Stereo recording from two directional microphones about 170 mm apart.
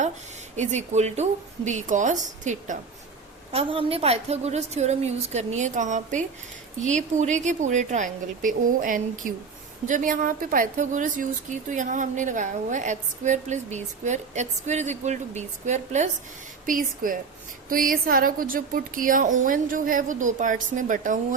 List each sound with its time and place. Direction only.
0.5 s a woman's voice: 45° right (ahead or behind)
3.5 s a woman's voice: 35° right (ahead or behind); by 21.3 s 50° right (ahead or behind)